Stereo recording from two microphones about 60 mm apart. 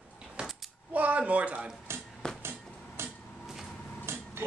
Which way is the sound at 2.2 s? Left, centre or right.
Centre.